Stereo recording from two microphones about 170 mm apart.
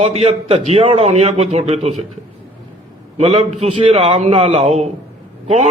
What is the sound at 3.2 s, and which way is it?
A man's voice, 40° right (ahead or behind).